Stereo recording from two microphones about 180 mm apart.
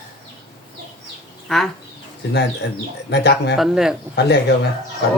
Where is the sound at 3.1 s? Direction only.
70° left (ahead or behind).